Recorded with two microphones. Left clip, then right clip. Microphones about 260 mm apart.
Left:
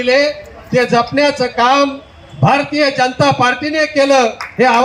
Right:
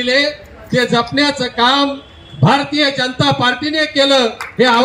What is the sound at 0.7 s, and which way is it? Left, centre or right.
Speech, left.